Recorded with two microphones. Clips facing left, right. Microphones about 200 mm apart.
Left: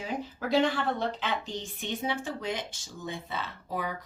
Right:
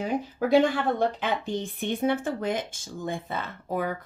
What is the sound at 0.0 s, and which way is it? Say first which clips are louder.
Speech: right 7 dB; 50° right (ahead or behind).